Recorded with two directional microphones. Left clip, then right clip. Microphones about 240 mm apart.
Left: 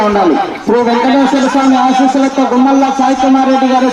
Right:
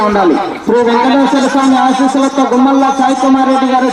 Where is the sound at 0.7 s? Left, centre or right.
Centre.